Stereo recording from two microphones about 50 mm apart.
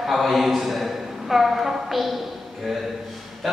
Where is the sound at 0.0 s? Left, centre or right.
Centre.